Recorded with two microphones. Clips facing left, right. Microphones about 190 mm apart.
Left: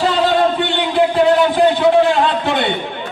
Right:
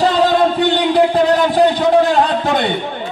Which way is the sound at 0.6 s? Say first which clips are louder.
Right 3 dB; 40° right (ahead or behind).